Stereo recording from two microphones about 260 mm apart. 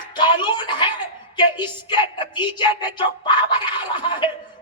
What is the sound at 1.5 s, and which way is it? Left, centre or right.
Speech, centre.